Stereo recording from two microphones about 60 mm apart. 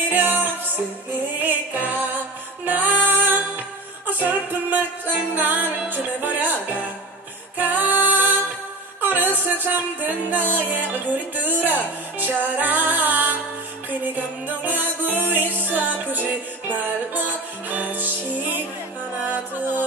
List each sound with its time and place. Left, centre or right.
0.1 s music: right